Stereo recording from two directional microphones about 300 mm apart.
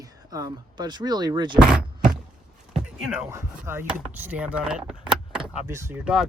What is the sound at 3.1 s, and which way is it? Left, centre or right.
Speech, centre.